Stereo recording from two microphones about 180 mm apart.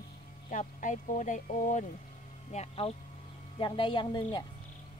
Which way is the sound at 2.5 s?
30° left (ahead or behind).